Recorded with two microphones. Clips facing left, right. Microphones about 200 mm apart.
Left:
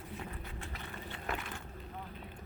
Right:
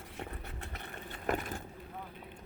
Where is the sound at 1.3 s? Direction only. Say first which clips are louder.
Right 7 dB; 40° right (ahead or behind).